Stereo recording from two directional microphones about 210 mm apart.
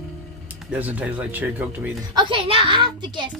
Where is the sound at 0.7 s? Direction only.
5° right (ahead or behind).